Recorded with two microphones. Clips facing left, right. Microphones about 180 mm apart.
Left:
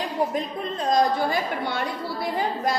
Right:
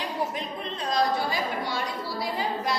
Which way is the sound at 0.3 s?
45° left (ahead or behind).